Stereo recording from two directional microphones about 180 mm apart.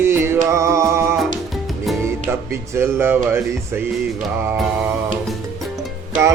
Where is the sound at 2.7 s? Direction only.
15° right (ahead or behind).